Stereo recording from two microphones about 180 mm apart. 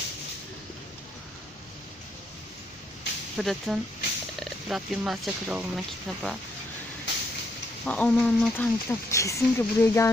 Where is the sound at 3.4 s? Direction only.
Centre (ahead or behind).